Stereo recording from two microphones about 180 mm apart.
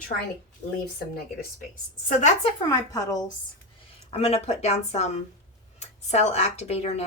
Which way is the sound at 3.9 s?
30° left (ahead or behind).